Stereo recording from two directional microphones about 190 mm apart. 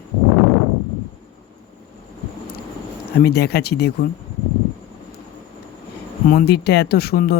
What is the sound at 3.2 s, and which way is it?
Speech, 55° left (ahead or behind).